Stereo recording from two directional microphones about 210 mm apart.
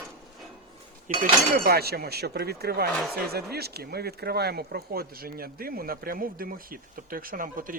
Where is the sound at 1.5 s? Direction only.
45° right (ahead or behind).